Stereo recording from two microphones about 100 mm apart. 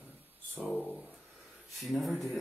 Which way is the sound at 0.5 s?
15° right (ahead or behind).